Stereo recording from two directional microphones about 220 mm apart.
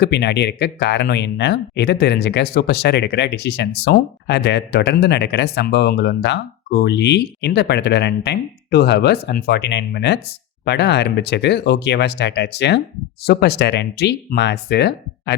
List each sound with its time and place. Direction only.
0.0 s speech: 50° left (ahead or behind)